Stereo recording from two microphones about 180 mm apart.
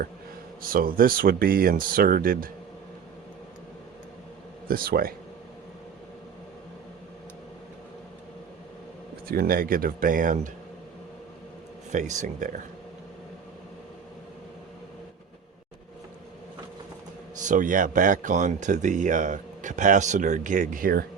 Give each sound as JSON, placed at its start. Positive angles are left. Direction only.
{"t": 0.6, "sound": "speech", "side_deg": -50}
{"t": 4.7, "sound": "speech", "side_deg": -55}
{"t": 9.2, "sound": "speech", "side_deg": -55}
{"t": 11.9, "sound": "speech", "side_deg": -40}
{"t": 17.4, "sound": "speech", "side_deg": -45}